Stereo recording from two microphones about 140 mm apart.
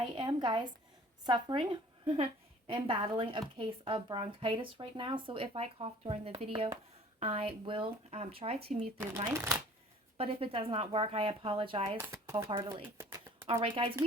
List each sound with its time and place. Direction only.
0.0 s a woman's voice: 35° right (ahead or behind)
9.2 s speech: 20° right (ahead or behind)
10.2 s speech: 40° right (ahead or behind)
11.9 s speech: 20° right (ahead or behind)
12.5 s speech: 35° right (ahead or behind)
13.0 s a sound: 20° right (ahead or behind)
13.5 s speech: 45° right (ahead or behind)